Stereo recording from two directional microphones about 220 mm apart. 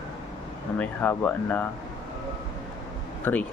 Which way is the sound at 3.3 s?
10° left (ahead or behind).